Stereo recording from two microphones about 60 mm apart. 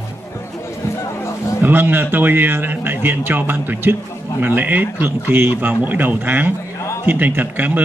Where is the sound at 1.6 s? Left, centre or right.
Right.